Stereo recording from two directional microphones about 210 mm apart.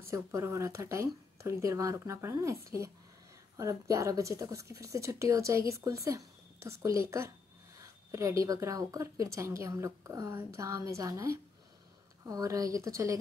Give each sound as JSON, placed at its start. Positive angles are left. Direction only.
{"t": 0.0, "sound": "speech", "side_deg": -15}